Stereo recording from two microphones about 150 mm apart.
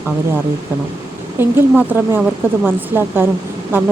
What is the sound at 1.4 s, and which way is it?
Speech, 15° right (ahead or behind).